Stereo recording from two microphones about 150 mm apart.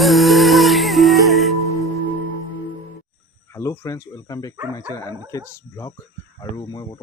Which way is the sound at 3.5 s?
20° left (ahead or behind).